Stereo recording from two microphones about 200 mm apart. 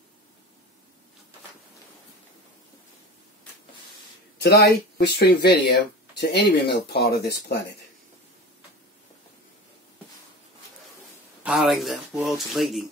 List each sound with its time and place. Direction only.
4.4 s speech: 55° left (ahead or behind)
11.4 s speech: centre (ahead or behind)